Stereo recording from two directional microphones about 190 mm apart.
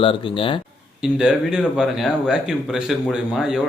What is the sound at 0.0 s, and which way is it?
Speech, 30° left (ahead or behind).